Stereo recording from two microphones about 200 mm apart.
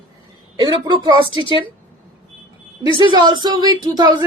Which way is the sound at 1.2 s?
25° left (ahead or behind).